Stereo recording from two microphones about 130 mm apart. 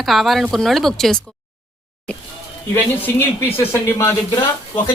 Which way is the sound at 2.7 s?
15° left (ahead or behind).